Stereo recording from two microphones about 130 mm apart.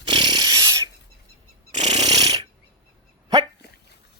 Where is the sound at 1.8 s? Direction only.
35° right (ahead or behind).